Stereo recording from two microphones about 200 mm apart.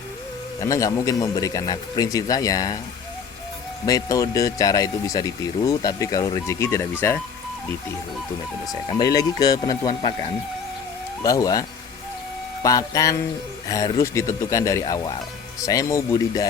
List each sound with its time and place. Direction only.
0.6 s speech: 15° left (ahead or behind)
3.8 s speech: 15° left (ahead or behind)
9.0 s speech: 20° left (ahead or behind)
11.2 s speech: 20° left (ahead or behind)
12.6 s speech: 15° left (ahead or behind)